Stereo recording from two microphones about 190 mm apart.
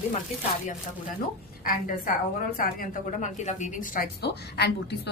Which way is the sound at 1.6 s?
45° left (ahead or behind).